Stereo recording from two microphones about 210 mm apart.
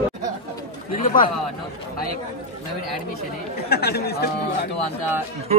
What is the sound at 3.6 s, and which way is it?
Speech, 50° left (ahead or behind).